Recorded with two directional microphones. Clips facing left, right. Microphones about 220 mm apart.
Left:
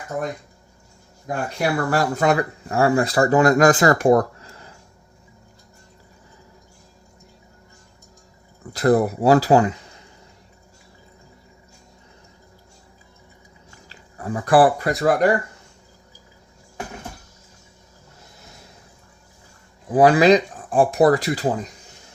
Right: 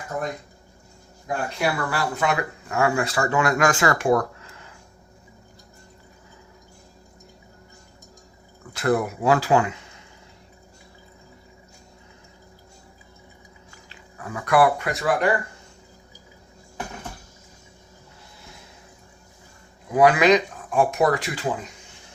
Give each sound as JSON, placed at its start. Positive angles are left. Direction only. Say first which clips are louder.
{"t": 1.5, "sound": "speech", "louder": "left 6 dB", "side_deg": 45}
{"t": 8.7, "sound": "speech", "louder": "left 5 dB", "side_deg": 35}
{"t": 13.9, "sound": "speech", "louder": "left 6 dB", "side_deg": 35}
{"t": 19.9, "sound": "speech", "louder": "left 3 dB", "side_deg": 30}